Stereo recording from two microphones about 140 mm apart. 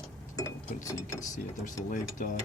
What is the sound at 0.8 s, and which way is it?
Mechanisms, 25° left (ahead or behind).